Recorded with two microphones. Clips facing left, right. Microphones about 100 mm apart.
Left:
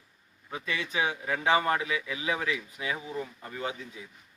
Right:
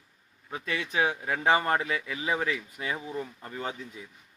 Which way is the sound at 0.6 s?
45° right (ahead or behind).